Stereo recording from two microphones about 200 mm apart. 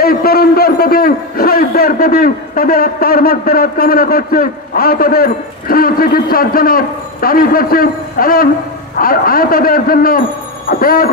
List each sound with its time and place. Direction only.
0.0 s a man's voice: 50° left (ahead or behind)